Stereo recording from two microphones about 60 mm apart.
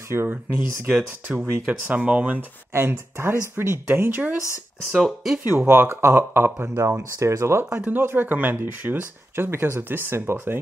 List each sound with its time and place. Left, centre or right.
0.8 s speech: right
2.7 s speech: right
4.9 s speech: centre
5.7 s speech: right
5.9 s speech: right
7.0 s speech: right
7.7 s speech: right
8.0 s speech: right